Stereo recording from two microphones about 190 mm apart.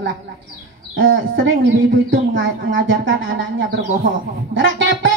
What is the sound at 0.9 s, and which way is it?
A woman's voice, 85° right.